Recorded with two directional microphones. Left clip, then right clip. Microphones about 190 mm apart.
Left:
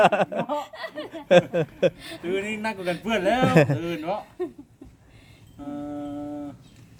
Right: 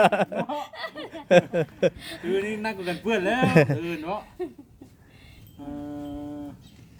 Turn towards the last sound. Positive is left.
turn(degrees=30)  # may be behind; listen again after turning